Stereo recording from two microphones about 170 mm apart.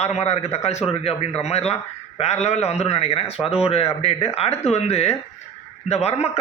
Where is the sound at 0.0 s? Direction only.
40° left (ahead or behind).